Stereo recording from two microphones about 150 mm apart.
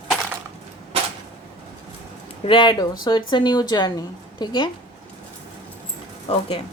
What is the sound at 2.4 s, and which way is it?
A woman's voice, 30° left (ahead or behind).